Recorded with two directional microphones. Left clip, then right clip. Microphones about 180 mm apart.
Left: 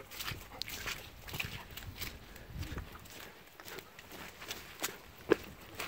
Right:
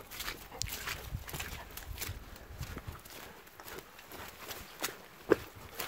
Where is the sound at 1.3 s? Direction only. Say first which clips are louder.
Left 2 dB; 10° right (ahead or behind).